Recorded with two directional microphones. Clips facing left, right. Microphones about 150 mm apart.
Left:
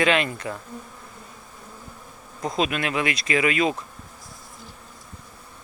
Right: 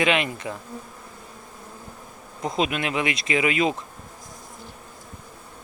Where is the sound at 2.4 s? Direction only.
20° right (ahead or behind).